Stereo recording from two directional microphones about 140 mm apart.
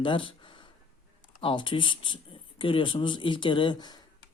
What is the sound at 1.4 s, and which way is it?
Speech, 35° left (ahead or behind).